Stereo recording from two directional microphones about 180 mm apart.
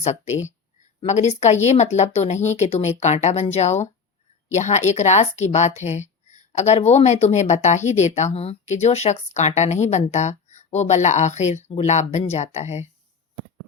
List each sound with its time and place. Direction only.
0.0 s speech: 40° left (ahead or behind)